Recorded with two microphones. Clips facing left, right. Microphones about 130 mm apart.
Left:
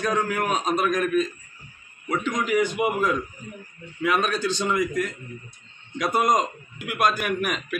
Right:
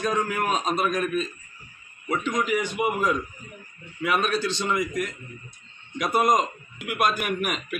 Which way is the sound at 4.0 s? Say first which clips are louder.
Left 1 dB; 5° right (ahead or behind).